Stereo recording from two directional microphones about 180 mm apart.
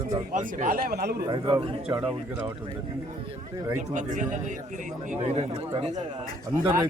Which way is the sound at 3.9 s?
45° right (ahead or behind).